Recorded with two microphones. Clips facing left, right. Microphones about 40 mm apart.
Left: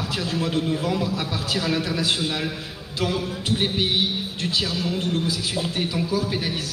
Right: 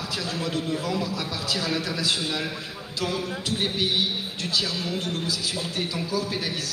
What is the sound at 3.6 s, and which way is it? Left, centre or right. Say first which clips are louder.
A man's voice: left 2 dB; left.